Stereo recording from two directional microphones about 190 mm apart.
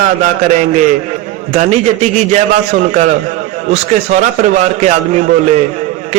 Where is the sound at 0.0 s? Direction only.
40° right (ahead or behind).